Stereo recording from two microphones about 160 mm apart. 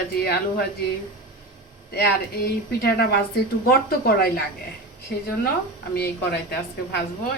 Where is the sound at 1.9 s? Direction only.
80° left.